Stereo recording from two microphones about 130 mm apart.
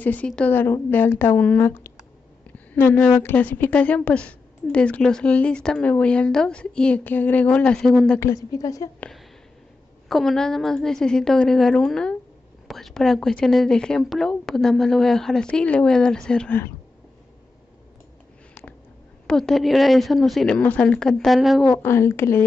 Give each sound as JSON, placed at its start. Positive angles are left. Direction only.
{"t": 0.0, "sound": "a woman's voice", "side_deg": 10}
{"t": 8.2, "sound": "a woman's voice", "side_deg": 25}
{"t": 10.0, "sound": "speech", "side_deg": 0}
{"t": 19.2, "sound": "speech", "side_deg": 5}
{"t": 21.7, "sound": "a woman's voice", "side_deg": 20}